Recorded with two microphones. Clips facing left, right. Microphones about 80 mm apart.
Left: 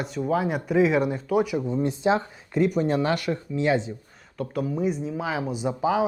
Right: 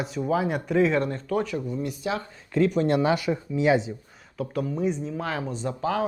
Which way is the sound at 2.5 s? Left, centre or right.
Centre.